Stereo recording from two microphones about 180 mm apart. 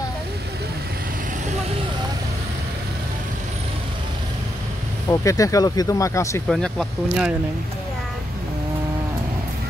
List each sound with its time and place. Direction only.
5.1 s speech: 20° left (ahead or behind)
6.5 s speech: centre (ahead or behind)